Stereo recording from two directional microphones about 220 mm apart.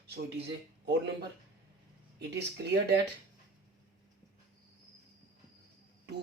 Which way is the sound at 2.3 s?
50° right (ahead or behind).